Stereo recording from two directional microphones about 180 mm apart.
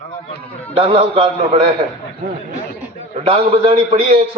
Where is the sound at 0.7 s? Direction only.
35° right (ahead or behind).